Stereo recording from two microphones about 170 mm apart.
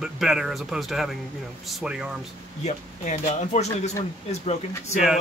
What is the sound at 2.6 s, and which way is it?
Speech, 40° left (ahead or behind).